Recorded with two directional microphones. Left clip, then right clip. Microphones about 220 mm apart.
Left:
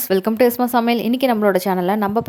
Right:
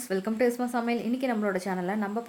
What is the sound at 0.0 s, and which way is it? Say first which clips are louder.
A woman's voice: left 11 dB; 40° left (ahead or behind).